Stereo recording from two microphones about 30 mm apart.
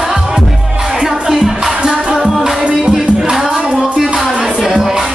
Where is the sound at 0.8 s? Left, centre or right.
Centre.